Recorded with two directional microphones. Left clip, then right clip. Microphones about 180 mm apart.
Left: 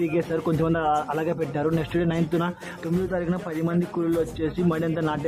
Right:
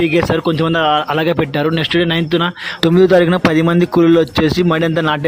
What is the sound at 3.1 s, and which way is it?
A man's voice, 50° right (ahead or behind).